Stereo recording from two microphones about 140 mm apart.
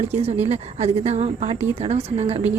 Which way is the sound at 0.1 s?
50° right (ahead or behind).